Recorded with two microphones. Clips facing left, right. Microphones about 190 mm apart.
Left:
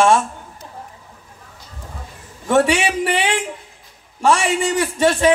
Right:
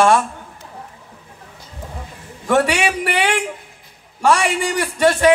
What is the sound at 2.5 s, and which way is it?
A man's voice, 20° left (ahead or behind).